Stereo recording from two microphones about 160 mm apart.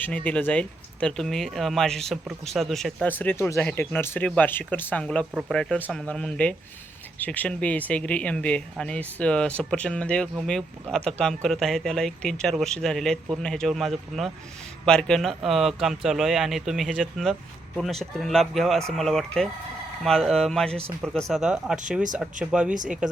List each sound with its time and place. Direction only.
0.0 s speech: 10° left (ahead or behind)